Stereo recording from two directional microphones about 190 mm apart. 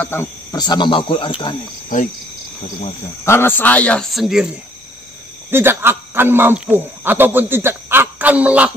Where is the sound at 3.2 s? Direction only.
10° left (ahead or behind).